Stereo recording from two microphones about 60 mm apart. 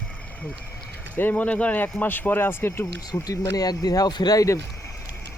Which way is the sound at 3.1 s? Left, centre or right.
Left.